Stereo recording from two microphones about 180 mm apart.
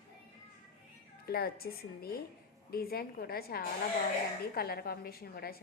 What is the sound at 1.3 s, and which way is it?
A woman's voice, 55° left (ahead or behind).